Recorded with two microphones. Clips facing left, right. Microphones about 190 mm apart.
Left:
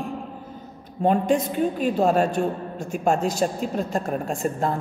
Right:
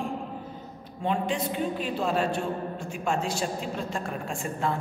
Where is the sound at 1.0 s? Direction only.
45° left (ahead or behind).